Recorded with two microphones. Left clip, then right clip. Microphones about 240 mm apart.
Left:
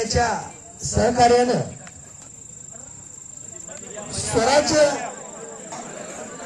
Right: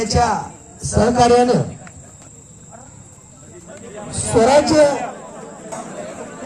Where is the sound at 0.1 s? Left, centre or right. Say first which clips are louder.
Right 5 dB; right.